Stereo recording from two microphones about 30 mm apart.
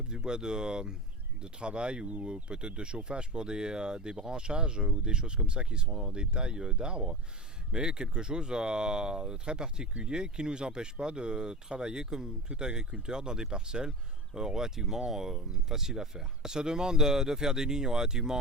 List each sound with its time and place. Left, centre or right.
0.1 s speech: right